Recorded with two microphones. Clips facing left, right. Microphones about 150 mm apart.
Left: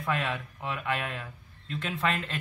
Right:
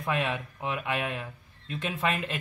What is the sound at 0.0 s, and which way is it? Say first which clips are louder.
A man's voice: right 1 dB; 15° right (ahead or behind).